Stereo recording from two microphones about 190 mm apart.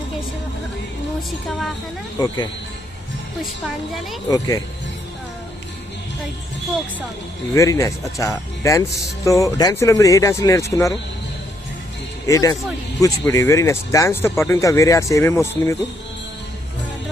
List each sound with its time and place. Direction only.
1.5 s a woman's voice: centre (ahead or behind)
2.1 s speech: 20° left (ahead or behind)
4.3 s speech: 20° left (ahead or behind)
7.5 s speech: 15° left (ahead or behind)
12.3 s speech: 20° left (ahead or behind)